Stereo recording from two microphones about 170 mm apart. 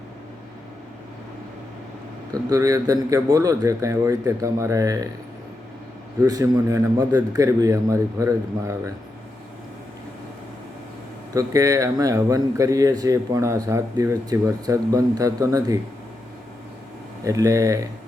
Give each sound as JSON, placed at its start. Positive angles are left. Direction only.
{"t": 2.3, "sound": "speech", "side_deg": -20}
{"t": 6.2, "sound": "speech", "side_deg": -20}
{"t": 11.3, "sound": "speech", "side_deg": -20}
{"t": 17.2, "sound": "speech", "side_deg": -20}